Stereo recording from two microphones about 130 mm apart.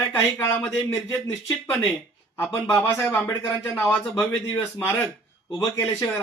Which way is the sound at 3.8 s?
15° left (ahead or behind).